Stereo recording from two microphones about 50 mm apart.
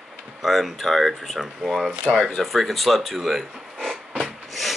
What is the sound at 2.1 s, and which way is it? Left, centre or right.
Speech, right.